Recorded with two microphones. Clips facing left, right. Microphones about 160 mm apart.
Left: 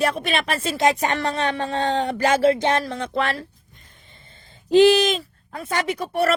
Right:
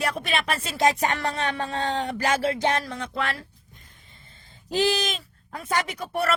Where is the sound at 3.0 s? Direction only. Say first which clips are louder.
Left 5 dB; 50° left (ahead or behind).